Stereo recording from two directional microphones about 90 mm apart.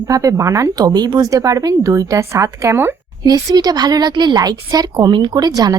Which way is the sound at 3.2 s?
50° right (ahead or behind).